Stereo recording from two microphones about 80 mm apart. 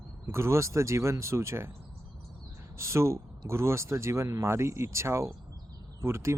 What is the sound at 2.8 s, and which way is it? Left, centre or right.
Speech, right.